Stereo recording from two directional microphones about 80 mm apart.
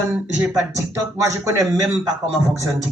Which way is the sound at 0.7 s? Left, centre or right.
Right.